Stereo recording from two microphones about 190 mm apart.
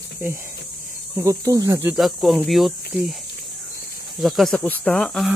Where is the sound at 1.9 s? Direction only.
Centre (ahead or behind).